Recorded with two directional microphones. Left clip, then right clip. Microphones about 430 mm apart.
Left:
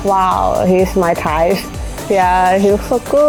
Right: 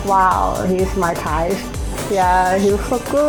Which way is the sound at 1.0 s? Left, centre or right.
Left.